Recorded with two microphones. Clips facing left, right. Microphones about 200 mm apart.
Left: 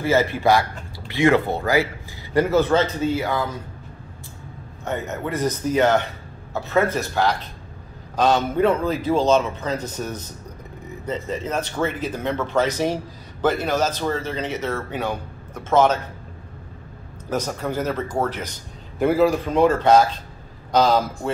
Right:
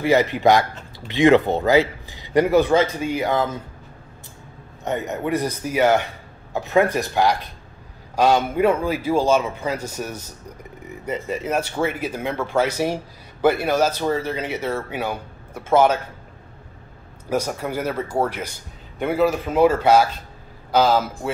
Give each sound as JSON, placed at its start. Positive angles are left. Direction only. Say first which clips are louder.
{"t": 0.0, "sound": "speech", "louder": "right 2 dB", "side_deg": -15}
{"t": 4.8, "sound": "speech", "louder": "right 3 dB", "side_deg": -15}
{"t": 17.3, "sound": "speech", "louder": "right 1 dB", "side_deg": -10}
{"t": 18.9, "sound": "a man's voice", "louder": "left 2 dB", "side_deg": 0}